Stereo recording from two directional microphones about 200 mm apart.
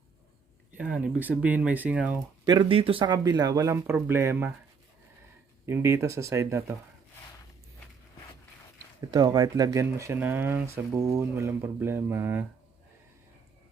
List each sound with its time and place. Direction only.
0.7 s speech: 5° right (ahead or behind)
2.5 s speech: 25° right (ahead or behind)
5.6 s speech: 15° right (ahead or behind)
9.1 s speech: 20° right (ahead or behind)